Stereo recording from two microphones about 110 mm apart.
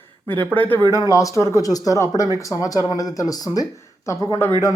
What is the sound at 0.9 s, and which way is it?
Speech, 30° left (ahead or behind).